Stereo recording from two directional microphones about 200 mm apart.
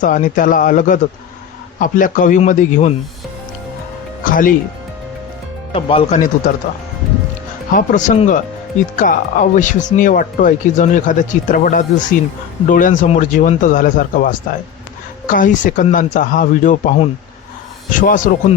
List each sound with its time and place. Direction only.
0.0 s speech: 40° left (ahead or behind)
4.2 s music: 40° left (ahead or behind)
5.7 s speech: 30° left (ahead or behind)
7.7 s speech: 40° left (ahead or behind)
15.4 s speech: 40° left (ahead or behind)